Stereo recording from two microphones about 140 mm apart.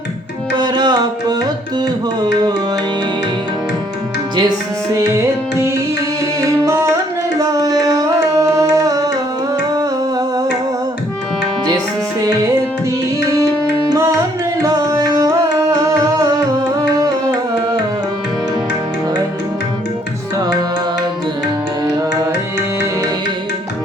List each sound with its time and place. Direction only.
0.5 s music: 30° right (ahead or behind)
4.9 s music: 20° right (ahead or behind)
6.4 s tabla: 20° right (ahead or behind)
9.7 s humming: 25° right (ahead or behind)
13.9 s music: 20° right (ahead or behind)